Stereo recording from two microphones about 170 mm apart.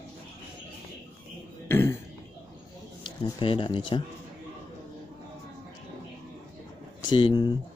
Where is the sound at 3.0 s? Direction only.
30° left (ahead or behind).